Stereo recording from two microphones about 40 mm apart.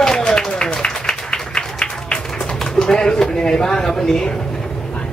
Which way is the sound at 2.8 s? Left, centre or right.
Centre.